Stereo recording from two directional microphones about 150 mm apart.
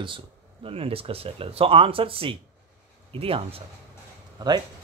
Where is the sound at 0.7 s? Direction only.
40° right (ahead or behind).